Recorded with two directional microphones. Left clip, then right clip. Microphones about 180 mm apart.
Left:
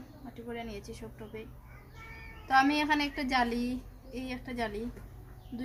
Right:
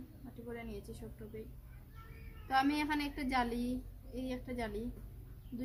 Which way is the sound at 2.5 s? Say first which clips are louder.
Left 7 dB; 30° left (ahead or behind).